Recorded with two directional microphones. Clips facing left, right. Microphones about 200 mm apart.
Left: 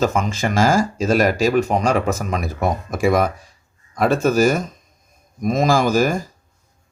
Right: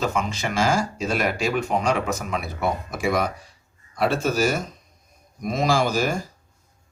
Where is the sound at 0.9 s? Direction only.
45° left (ahead or behind).